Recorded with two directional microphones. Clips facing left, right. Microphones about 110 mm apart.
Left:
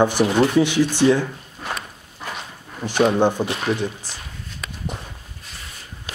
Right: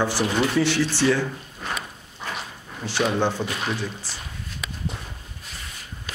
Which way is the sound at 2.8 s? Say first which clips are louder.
Left 6 dB; 15° left (ahead or behind).